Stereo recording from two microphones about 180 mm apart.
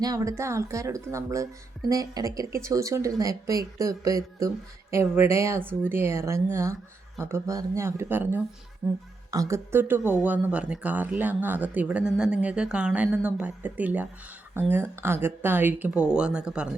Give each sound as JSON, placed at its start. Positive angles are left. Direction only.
{"t": 0.0, "sound": "speech", "side_deg": -20}